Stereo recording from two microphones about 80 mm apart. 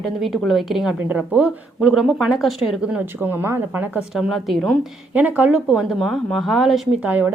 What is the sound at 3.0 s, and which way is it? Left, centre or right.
Speech, right.